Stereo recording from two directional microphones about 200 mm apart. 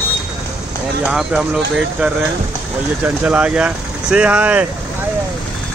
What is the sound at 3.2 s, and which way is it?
Speech, 5° right (ahead or behind).